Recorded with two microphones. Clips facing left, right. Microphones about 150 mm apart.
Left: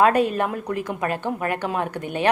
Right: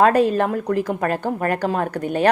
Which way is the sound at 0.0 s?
35° right (ahead or behind).